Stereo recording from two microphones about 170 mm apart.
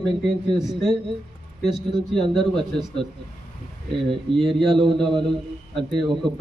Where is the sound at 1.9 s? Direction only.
25° right (ahead or behind).